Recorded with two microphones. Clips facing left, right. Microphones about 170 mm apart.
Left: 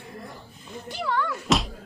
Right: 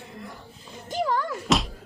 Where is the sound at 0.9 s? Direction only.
40° right (ahead or behind).